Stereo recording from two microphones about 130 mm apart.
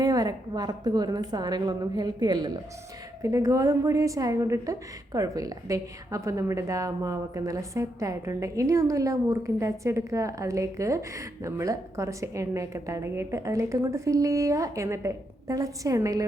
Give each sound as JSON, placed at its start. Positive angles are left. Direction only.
{"t": 0.0, "sound": "a woman's voice", "side_deg": -30}